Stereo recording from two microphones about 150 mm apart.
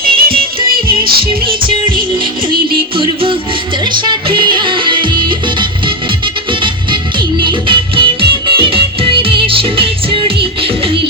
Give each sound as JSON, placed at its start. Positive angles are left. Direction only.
{"t": 0.0, "sound": "music", "side_deg": -85}
{"t": 1.5, "sound": "music", "side_deg": -35}
{"t": 2.9, "sound": "music", "side_deg": -35}